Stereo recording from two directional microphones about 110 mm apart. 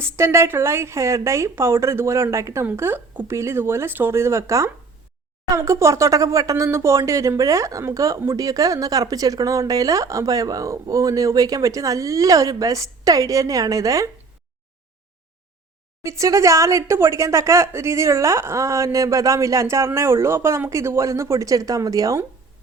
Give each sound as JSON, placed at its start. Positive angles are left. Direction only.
{"t": 0.0, "sound": "speech", "side_deg": -25}
{"t": 16.0, "sound": "speech", "side_deg": -30}